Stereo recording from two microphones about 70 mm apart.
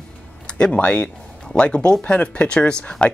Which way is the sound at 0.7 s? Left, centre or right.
Left.